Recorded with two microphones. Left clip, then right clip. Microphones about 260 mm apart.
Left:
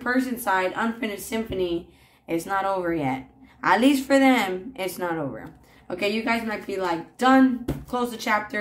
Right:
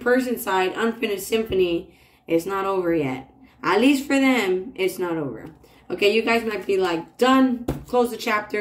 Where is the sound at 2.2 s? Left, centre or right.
Centre.